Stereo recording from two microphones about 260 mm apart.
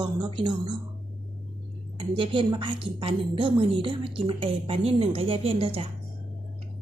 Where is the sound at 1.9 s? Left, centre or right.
Centre.